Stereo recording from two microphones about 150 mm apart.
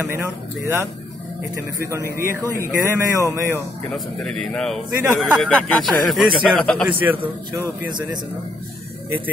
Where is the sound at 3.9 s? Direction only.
5° left (ahead or behind).